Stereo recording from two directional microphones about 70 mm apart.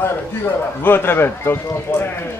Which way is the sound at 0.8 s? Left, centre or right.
Left.